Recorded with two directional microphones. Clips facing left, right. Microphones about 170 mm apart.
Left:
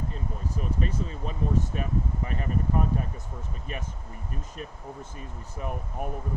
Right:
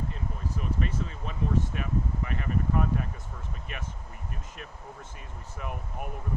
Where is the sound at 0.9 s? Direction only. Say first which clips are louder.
Left 2 dB; 35° left (ahead or behind).